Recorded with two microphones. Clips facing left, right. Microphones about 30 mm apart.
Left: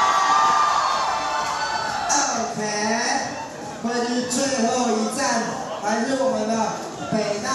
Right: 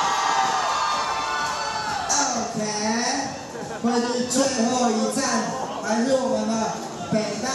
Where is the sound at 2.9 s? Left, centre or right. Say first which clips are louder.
Left 1 dB; centre.